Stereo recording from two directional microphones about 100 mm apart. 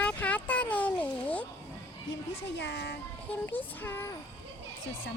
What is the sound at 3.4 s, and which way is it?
Child singing, 20° left (ahead or behind).